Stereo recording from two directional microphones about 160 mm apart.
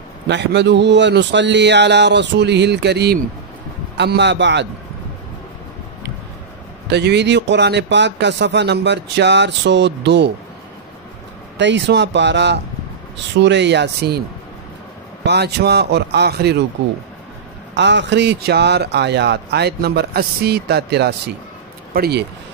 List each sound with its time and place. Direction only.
0.3 s speech: 90° right
6.9 s speech: 90° right
11.5 s speech: 90° right
15.2 s speech: 90° right
17.7 s speech: 90° right
21.9 s speech: 75° right (ahead or behind)